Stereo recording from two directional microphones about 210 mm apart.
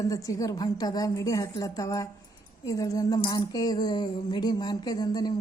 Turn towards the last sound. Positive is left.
turn(degrees=20)  # may be behind; listen again after turning